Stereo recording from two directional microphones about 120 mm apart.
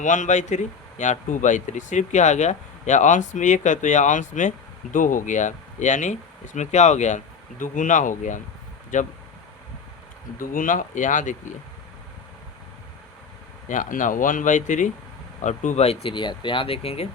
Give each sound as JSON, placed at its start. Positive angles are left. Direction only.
{"t": 0.0, "sound": "speech", "side_deg": 90}
{"t": 7.6, "sound": "speech", "side_deg": 90}
{"t": 10.7, "sound": "speech", "side_deg": 90}
{"t": 13.7, "sound": "speech", "side_deg": 90}
{"t": 15.4, "sound": "speech", "side_deg": 80}
{"t": 16.1, "sound": "speech", "side_deg": 40}